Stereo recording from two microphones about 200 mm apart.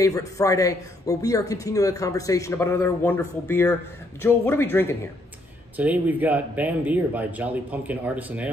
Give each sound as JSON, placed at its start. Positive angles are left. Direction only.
{"t": 0.0, "sound": "speech", "side_deg": 15}
{"t": 5.8, "sound": "speech", "side_deg": -10}